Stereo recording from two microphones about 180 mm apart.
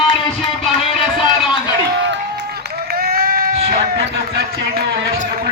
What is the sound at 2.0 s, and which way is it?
Run, 70° right (ahead or behind).